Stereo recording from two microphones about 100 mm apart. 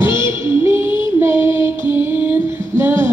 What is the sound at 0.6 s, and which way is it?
Child singing, 25° right (ahead or behind).